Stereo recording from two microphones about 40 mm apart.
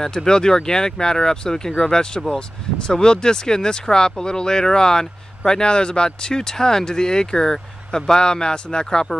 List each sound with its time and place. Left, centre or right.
0.0 s speech: centre